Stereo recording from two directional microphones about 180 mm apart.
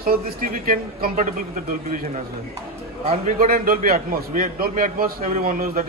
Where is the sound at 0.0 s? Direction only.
55° right (ahead or behind).